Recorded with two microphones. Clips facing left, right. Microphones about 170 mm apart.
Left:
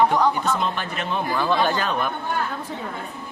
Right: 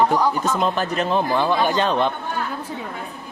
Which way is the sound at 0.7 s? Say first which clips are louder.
Right 6 dB; 40° right (ahead or behind).